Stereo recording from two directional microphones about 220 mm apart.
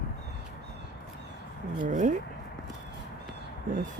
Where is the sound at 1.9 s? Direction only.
35° right (ahead or behind).